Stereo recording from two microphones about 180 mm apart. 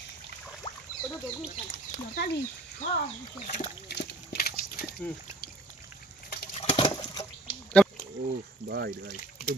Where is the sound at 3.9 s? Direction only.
60° left (ahead or behind).